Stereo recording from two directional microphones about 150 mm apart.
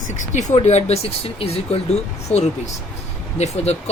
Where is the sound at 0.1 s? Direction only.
55° left (ahead or behind).